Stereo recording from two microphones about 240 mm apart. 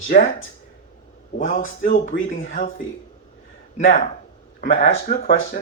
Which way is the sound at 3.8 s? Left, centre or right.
Left.